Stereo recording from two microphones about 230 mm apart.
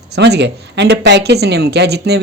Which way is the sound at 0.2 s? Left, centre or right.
Right.